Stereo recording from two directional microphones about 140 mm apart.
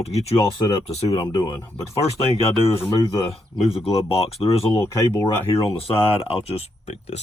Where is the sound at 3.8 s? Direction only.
45° left (ahead or behind).